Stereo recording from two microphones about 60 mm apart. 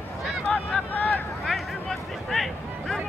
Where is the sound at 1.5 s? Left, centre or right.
Centre.